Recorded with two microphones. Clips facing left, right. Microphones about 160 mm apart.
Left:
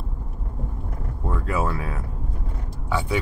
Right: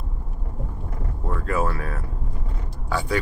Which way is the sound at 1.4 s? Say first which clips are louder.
Right 1 dB; 15° left (ahead or behind).